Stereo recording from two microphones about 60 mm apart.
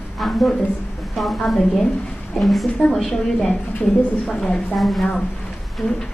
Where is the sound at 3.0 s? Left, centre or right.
Centre.